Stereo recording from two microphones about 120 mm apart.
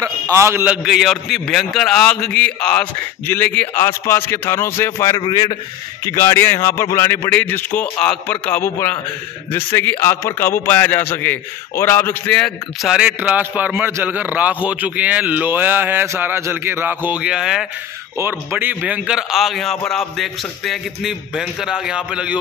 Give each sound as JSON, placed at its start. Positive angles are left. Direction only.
{"t": 0.0, "sound": "a man's voice", "side_deg": -25}
{"t": 0.7, "sound": "a man's voice", "side_deg": 0}
{"t": 5.2, "sound": "a man's voice", "side_deg": 40}
{"t": 6.0, "sound": "a man's voice", "side_deg": 25}
{"t": 12.3, "sound": "a man's voice", "side_deg": 5}
{"t": 12.9, "sound": "a man's voice", "side_deg": -10}
{"t": 18.1, "sound": "a man's voice", "side_deg": -20}